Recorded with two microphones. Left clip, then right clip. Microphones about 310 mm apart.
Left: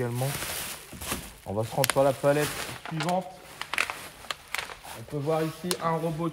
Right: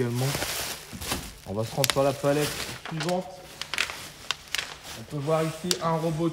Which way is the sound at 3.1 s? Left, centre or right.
Centre.